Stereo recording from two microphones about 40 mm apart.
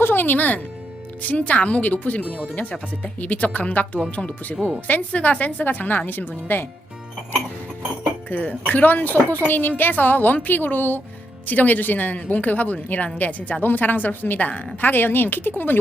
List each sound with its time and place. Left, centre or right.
0.0 s a woman's voice: left
8.3 s a woman's voice: left
14.8 s speech: left